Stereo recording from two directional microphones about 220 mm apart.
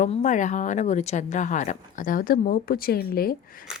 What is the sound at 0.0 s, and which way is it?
Speech, 35° left (ahead or behind).